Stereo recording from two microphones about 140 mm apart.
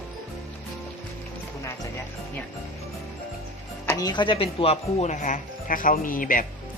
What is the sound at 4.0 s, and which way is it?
Speech, 30° left (ahead or behind).